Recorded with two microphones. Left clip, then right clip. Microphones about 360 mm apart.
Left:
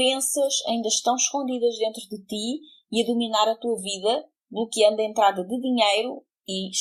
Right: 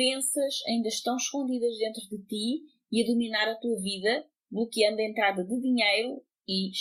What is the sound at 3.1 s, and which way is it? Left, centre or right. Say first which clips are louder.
A woman's voice: left 6 dB; left.